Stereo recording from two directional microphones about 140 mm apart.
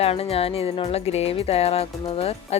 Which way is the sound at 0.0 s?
45° left (ahead or behind).